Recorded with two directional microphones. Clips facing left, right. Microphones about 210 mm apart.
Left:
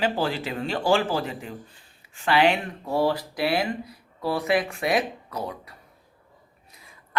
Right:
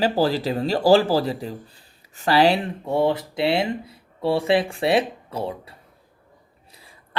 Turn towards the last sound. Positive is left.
turn(degrees=-30)  # may be behind; listen again after turning